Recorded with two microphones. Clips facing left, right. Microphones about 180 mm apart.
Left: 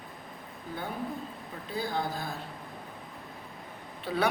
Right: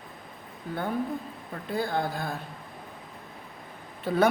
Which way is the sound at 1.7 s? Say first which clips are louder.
Right 4 dB; 55° right (ahead or behind).